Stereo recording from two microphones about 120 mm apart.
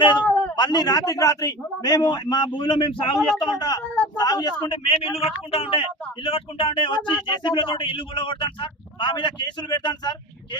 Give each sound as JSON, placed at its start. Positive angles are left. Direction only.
{"t": 0.0, "sound": "a man's voice", "side_deg": 40}
{"t": 5.0, "sound": "a man's voice", "side_deg": 55}